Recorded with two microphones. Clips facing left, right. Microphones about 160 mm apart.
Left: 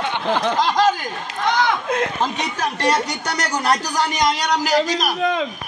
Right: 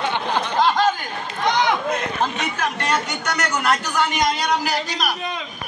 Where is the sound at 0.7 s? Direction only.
40° left (ahead or behind).